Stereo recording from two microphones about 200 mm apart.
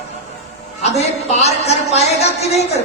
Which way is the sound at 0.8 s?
35° left (ahead or behind).